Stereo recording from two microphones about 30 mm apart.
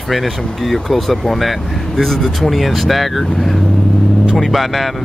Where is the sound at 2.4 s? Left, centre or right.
Centre.